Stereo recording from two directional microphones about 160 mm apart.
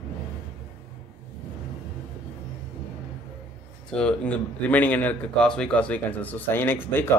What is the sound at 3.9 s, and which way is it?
Speech, 5° left (ahead or behind).